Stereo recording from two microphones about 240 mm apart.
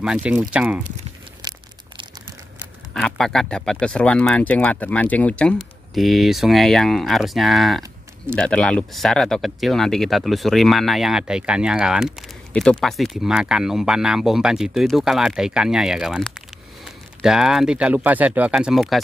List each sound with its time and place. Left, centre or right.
0.0 s speech: centre
1.4 s crumpling: centre
2.9 s speech: centre